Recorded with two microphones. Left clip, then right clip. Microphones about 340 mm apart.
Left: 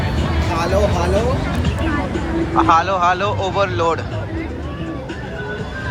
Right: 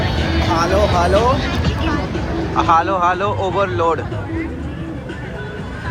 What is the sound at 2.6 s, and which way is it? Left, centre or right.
Speech, centre.